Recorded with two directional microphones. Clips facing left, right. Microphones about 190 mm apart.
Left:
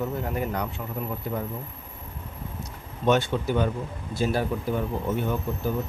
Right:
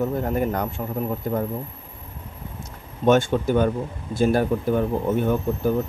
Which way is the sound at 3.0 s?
50° right (ahead or behind).